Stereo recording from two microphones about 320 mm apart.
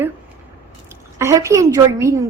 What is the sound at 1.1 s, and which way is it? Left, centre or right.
A woman's voice, centre.